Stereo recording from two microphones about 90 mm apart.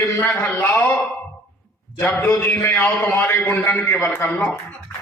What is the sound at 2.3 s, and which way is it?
A man's voice, 25° left (ahead or behind).